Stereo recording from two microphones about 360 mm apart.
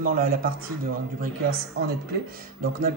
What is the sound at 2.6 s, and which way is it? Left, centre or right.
Speech, right.